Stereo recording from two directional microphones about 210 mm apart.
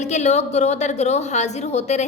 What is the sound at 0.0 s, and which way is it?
A woman's voice, 35° left (ahead or behind).